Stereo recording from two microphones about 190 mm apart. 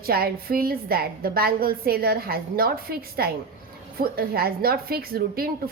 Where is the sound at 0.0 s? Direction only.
50° right (ahead or behind).